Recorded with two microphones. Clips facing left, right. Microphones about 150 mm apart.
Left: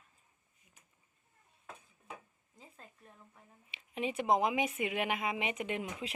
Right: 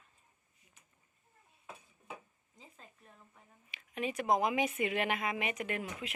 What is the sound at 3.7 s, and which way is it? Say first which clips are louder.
Speech: left 1 dB; 25° left (ahead or behind).